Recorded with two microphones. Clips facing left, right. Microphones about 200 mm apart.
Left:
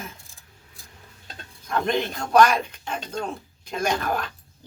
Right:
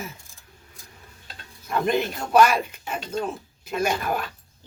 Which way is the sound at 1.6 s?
5° right (ahead or behind).